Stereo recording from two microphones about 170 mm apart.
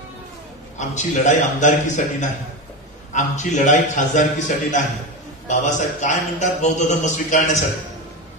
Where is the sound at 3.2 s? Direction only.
45° left (ahead or behind).